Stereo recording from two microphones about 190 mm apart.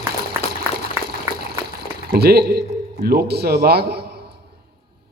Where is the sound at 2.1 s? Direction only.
55° right (ahead or behind).